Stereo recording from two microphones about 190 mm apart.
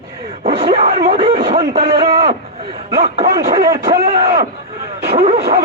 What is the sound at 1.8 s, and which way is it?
A man's voice, 55° right (ahead or behind).